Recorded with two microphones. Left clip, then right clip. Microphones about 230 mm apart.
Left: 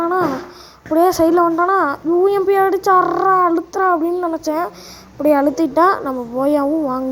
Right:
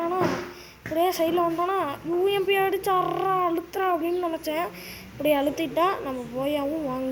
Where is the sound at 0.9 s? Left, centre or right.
Left.